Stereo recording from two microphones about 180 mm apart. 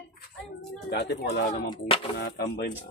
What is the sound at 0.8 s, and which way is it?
Speech, 65° left (ahead or behind).